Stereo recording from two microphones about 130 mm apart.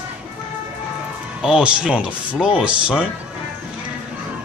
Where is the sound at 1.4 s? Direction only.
5° right (ahead or behind).